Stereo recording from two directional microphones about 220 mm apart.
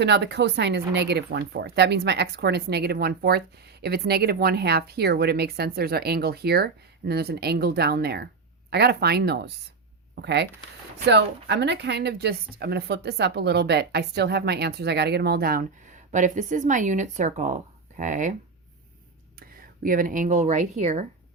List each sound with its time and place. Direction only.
0.0 s speech: 50° right (ahead or behind); by 18.3 s 35° right (ahead or behind)
19.4 s speech: 40° right (ahead or behind)